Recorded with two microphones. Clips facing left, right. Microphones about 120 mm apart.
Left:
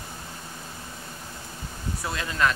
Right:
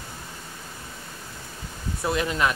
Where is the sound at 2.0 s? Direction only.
20° right (ahead or behind).